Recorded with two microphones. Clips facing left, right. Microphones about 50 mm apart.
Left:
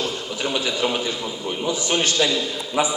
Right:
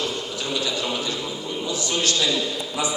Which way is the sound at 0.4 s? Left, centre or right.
Left.